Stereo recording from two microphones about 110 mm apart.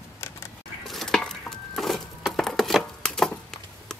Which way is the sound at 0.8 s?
5° left (ahead or behind).